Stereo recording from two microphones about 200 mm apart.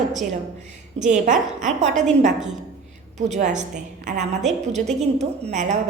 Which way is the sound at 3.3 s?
35° right (ahead or behind).